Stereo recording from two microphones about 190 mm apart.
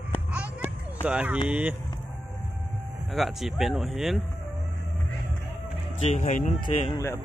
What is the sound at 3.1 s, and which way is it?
Speech, centre (ahead or behind).